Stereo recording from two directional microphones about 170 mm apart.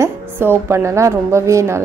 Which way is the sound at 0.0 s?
15° right (ahead or behind).